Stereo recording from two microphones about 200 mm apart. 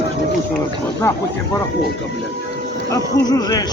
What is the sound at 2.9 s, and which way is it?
Speech, 20° left (ahead or behind).